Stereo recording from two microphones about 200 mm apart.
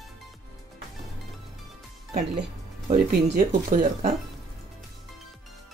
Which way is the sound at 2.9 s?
35° right (ahead or behind).